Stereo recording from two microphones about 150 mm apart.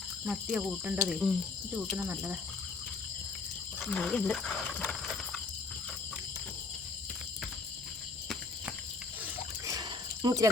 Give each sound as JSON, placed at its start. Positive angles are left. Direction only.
{"t": 0.3, "sound": "cricket", "side_deg": -5}
{"t": 3.8, "sound": "speech", "side_deg": 5}
{"t": 10.2, "sound": "speech", "side_deg": -20}